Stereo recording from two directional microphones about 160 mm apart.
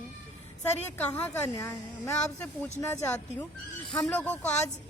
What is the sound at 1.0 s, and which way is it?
Speech, 10° left (ahead or behind).